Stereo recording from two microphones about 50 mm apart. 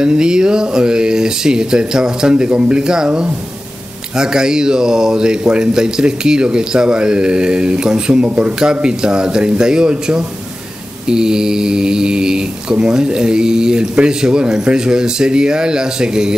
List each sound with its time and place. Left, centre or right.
0.0 s speech: centre